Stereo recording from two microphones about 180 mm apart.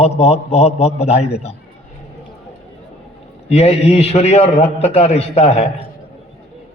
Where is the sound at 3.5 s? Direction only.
35° left (ahead or behind).